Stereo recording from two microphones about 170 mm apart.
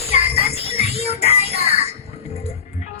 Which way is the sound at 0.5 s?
35° left (ahead or behind).